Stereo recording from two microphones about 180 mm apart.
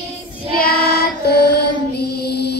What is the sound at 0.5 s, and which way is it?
Child singing, 60° left (ahead or behind).